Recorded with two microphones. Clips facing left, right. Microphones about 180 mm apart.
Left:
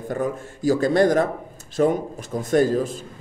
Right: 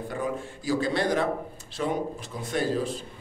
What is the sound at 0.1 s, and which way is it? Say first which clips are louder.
A man's voice: left 7 dB; 45° left (ahead or behind).